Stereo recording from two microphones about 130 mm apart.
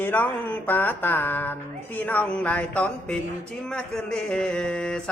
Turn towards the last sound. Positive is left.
turn(degrees=5)  # may be behind; listen again after turning